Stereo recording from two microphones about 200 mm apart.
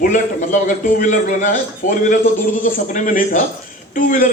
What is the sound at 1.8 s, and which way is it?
Speech, 40° left (ahead or behind).